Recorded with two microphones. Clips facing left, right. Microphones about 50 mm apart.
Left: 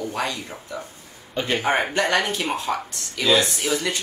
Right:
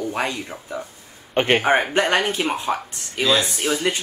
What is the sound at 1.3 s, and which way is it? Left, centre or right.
Speech, right.